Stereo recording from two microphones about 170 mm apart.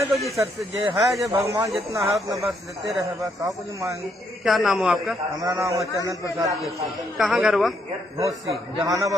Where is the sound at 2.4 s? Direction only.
Centre (ahead or behind).